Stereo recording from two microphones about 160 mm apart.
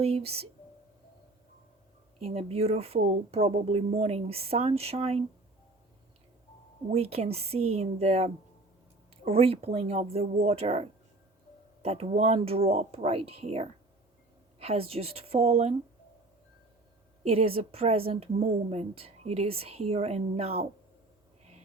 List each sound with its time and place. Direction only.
0.0 s a woman's voice: 40° right (ahead or behind)
2.3 s a woman's voice: 40° right (ahead or behind)
6.9 s a woman's voice: 40° right (ahead or behind)
17.2 s a woman's voice: 35° right (ahead or behind)